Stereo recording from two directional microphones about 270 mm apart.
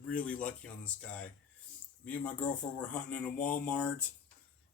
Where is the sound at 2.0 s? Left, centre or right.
Centre.